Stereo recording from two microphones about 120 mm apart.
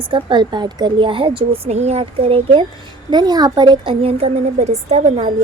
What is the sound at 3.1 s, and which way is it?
A woman's voice, 35° right (ahead or behind).